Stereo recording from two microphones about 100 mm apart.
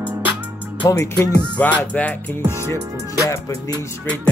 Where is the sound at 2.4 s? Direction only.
25° left (ahead or behind).